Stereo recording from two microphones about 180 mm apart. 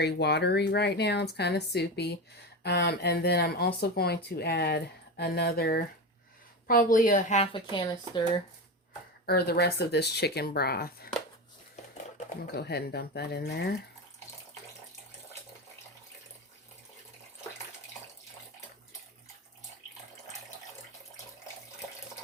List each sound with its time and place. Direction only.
0.0 s speech: 65° left (ahead or behind); by 8.4 s 25° left (ahead or behind)
9.2 s speech: 60° left (ahead or behind)
12.4 s speech: 60° left (ahead or behind)